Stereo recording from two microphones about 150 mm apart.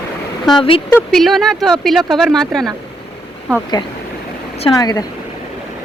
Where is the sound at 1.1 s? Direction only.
Centre (ahead or behind).